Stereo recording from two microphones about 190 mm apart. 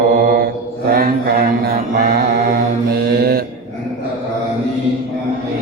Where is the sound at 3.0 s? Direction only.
55° right (ahead or behind).